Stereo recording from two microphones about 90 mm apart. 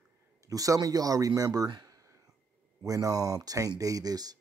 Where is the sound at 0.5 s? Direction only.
40° right (ahead or behind).